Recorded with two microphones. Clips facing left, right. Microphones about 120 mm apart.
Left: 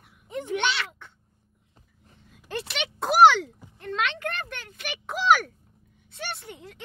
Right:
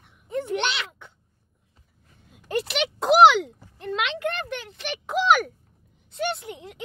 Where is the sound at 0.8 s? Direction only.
Centre (ahead or behind).